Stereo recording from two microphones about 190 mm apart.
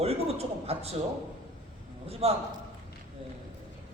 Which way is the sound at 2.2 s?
35° right (ahead or behind).